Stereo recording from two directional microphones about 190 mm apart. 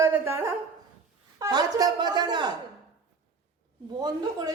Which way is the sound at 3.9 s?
20° right (ahead or behind).